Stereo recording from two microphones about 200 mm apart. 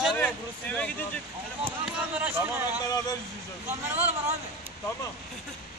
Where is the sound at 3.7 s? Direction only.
10° right (ahead or behind).